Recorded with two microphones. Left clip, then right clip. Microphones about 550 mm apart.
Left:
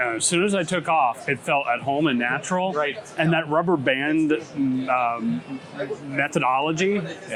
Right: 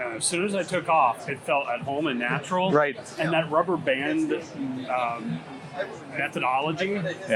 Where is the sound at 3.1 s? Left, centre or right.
Left.